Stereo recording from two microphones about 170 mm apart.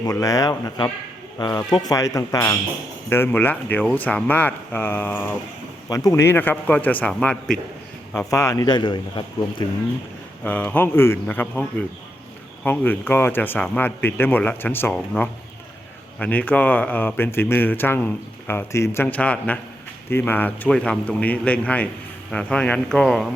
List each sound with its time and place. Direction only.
0.0 s a man's voice: 20° left (ahead or behind); by 7.5 s 5° left (ahead or behind)
8.3 s speech: 20° left (ahead or behind)
10.4 s a man's voice: 10° left (ahead or behind)